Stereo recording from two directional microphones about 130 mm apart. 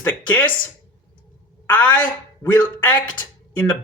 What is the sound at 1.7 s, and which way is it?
Speech, 10° left (ahead or behind).